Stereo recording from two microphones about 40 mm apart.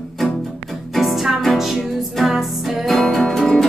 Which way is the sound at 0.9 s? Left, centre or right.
Centre.